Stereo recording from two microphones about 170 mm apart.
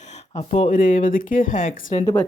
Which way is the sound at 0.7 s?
50° left (ahead or behind).